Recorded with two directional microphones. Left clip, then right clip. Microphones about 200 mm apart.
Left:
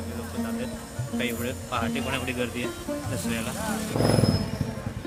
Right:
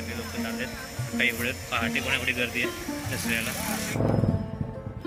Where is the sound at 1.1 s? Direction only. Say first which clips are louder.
Right 4 dB; 15° left (ahead or behind).